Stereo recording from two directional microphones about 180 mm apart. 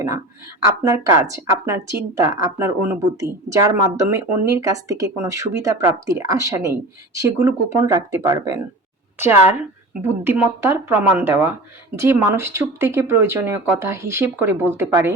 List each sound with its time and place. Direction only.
0.6 s speech: 20° right (ahead or behind)